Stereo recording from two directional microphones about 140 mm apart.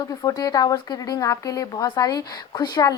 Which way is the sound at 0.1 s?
25° left (ahead or behind).